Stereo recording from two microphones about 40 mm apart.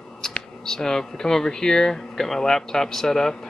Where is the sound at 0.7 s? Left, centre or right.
Centre.